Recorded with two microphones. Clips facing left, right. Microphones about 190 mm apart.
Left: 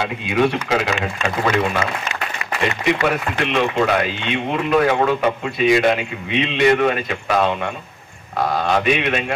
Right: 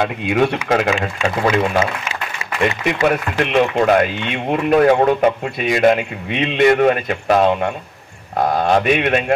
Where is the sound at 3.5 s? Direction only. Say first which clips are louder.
Right 4 dB; 50° right (ahead or behind).